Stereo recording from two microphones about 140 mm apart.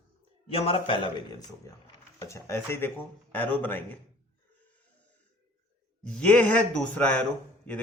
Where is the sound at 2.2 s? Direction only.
20° left (ahead or behind).